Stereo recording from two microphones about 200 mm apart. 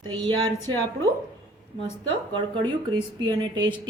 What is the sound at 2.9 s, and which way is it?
Speech, 20° right (ahead or behind).